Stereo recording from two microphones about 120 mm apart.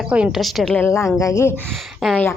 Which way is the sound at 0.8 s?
25° left (ahead or behind).